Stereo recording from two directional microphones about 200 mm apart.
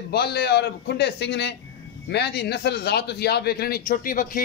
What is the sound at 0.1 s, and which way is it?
A man's voice, 50° left (ahead or behind).